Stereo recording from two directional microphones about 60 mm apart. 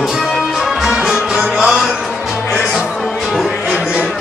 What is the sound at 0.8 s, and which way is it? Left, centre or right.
Music, centre.